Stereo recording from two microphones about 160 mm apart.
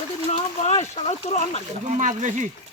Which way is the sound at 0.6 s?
40° left (ahead or behind).